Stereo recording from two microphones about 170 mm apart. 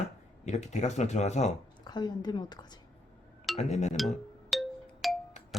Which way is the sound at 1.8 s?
25° left (ahead or behind).